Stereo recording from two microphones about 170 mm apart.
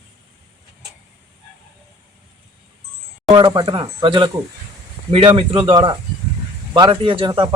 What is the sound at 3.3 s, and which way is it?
Speech, 25° right (ahead or behind).